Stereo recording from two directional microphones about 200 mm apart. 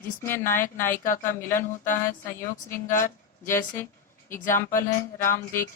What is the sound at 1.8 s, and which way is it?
Speech, 40° left (ahead or behind).